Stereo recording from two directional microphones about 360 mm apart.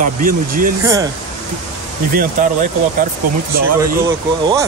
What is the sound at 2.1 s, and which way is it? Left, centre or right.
Speech, right.